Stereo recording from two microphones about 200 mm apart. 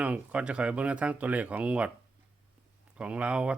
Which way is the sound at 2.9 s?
5° right (ahead or behind).